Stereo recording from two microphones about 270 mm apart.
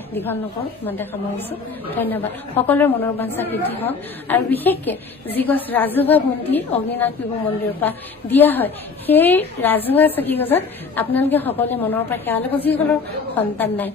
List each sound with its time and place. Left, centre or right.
1.9 s a woman's voice: centre